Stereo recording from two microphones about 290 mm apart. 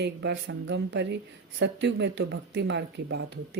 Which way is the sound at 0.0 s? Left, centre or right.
Right.